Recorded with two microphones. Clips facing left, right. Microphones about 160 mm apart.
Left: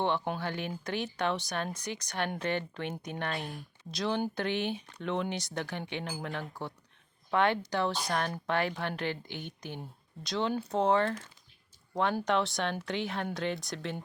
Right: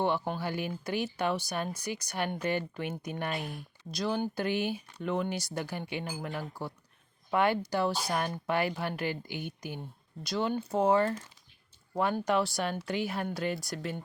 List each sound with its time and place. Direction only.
0.0 s speech: 5° right (ahead or behind)